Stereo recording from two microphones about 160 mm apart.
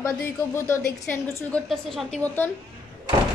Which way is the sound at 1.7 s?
Centre (ahead or behind).